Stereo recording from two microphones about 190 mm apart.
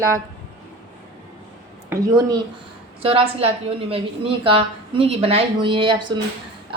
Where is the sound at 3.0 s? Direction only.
30° right (ahead or behind).